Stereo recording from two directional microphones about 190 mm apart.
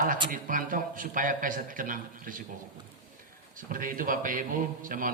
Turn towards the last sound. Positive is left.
turn(degrees=-45)  # may be behind; listen again after turning